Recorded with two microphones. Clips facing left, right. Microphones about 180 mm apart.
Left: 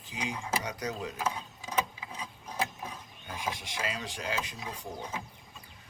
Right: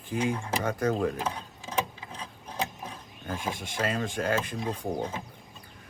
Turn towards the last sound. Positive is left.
turn(degrees=-55)  # may be behind; listen again after turning